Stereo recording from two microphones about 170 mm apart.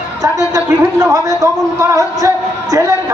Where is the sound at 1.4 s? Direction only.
15° right (ahead or behind).